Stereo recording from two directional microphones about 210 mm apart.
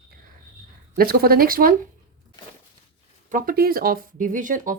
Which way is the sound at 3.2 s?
40° right (ahead or behind).